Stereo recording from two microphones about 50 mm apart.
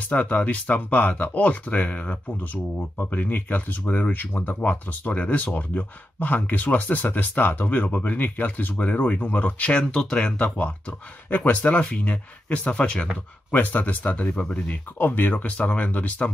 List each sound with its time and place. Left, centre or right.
0.1 s speech: left
4.1 s speech: left
4.6 s speech: left
13.5 s speech: left
14.3 s speech: centre
14.7 s speech: left